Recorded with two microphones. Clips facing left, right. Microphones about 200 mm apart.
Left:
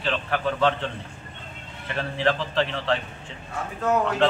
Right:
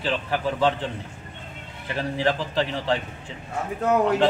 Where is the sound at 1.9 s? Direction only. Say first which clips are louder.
Right 1 dB; 15° right (ahead or behind).